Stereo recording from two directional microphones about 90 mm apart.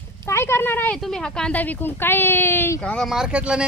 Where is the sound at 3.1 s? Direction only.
10° right (ahead or behind).